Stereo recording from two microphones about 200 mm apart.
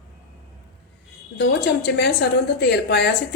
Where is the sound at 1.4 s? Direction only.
55° left (ahead or behind).